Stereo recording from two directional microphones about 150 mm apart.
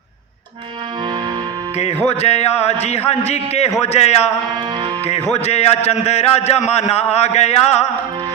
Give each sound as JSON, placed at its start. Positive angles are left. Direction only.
{"t": 2.0, "sound": "a man's voice", "side_deg": 45}
{"t": 5.4, "sound": "a man's voice", "side_deg": 45}